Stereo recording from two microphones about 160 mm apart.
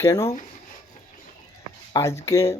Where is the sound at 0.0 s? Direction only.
15° left (ahead or behind).